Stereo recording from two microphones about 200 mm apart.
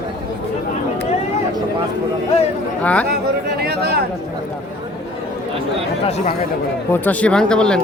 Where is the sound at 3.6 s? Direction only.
50° right (ahead or behind).